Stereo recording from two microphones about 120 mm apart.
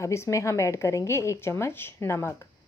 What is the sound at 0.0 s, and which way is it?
A woman's voice, 25° left (ahead or behind).